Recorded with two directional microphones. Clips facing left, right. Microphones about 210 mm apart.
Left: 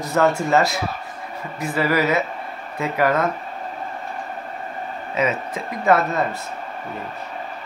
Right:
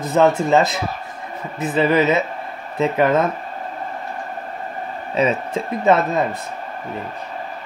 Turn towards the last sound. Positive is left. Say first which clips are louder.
# right 2 dB
turn(degrees=-20)  # may be behind; listen again after turning